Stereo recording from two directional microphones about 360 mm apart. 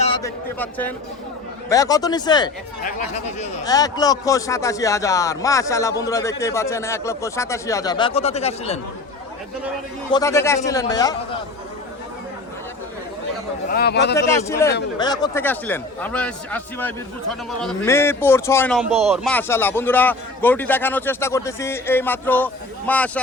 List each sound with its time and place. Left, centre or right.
0.0 s a man's voice: centre
10.1 s a man's voice: centre
13.7 s speech: left
14.2 s a man's voice: centre